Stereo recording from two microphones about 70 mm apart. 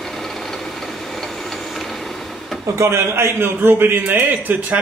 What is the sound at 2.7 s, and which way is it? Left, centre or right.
A man's voice, right.